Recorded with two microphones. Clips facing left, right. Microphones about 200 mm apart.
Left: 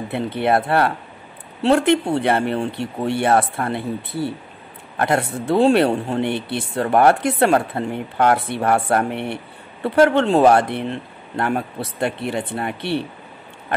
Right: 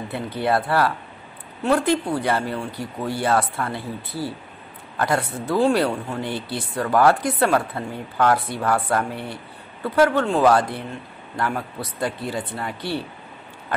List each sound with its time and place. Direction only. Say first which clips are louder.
0.1 s speech: left 4 dB; 25° left (ahead or behind)